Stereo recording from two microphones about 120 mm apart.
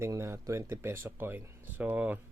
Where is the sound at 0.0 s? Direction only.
25° right (ahead or behind).